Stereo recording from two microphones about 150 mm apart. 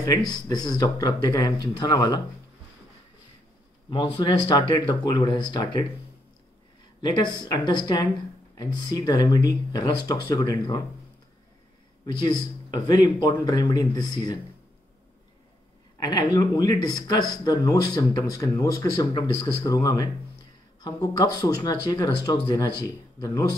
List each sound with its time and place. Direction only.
0.3 s speech: 30° left (ahead or behind)
3.9 s speech: 35° left (ahead or behind)
7.0 s speech: 30° left (ahead or behind)
12.1 s speech: 30° left (ahead or behind)
16.0 s speech: 25° left (ahead or behind)
22.8 s a man's voice: 25° left (ahead or behind)